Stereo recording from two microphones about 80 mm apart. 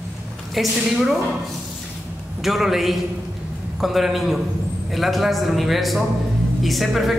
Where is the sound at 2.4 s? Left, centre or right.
Centre.